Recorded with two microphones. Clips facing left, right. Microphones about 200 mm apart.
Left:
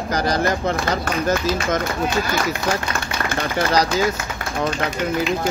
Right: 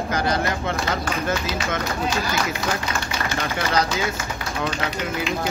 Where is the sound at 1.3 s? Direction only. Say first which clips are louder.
Left 5 dB; 50° left (ahead or behind).